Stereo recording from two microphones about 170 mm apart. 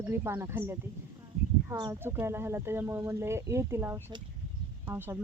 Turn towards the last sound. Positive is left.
turn(degrees=-15)  # may be behind; listen again after turning